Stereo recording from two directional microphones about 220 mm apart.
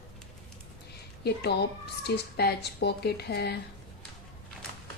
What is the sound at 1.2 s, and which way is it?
A woman's voice, 45° left (ahead or behind).